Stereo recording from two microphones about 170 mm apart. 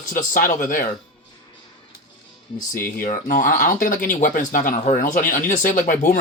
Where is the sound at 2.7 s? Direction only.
55° left (ahead or behind).